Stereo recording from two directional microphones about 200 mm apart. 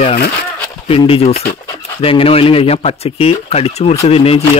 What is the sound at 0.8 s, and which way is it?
Speech, 30° left (ahead or behind).